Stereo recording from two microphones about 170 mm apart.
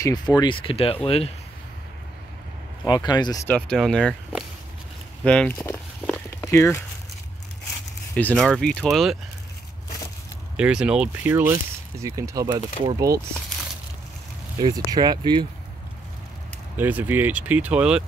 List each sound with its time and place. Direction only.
0.0 s speech: 25° left (ahead or behind)
2.8 s speech: 25° left (ahead or behind)
3.4 s speech: 5° left (ahead or behind)
5.2 s speech: 5° left (ahead or behind)
5.6 s a sound: 10° left (ahead or behind)
8.2 s speech: 5° left (ahead or behind)
10.5 s speech: 5° right (ahead or behind); by 13.2 s 20° right (ahead or behind)
14.6 s speech: 25° right (ahead or behind)
16.7 s speech: 10° right (ahead or behind)